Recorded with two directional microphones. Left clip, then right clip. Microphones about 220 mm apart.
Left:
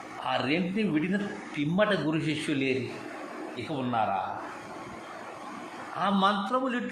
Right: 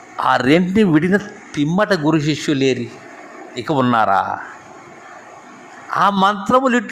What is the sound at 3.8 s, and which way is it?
Speech, 40° right (ahead or behind).